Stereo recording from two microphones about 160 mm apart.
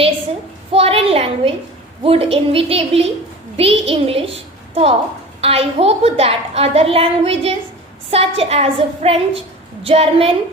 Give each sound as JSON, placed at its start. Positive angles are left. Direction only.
{"t": 0.7, "sound": "a woman's voice", "side_deg": -40}